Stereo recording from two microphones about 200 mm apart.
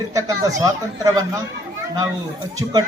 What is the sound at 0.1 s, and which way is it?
A man's voice, 15° right (ahead or behind).